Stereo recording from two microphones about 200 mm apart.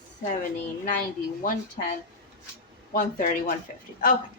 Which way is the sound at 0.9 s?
40° left (ahead or behind).